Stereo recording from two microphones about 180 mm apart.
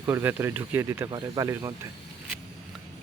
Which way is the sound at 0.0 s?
15° right (ahead or behind).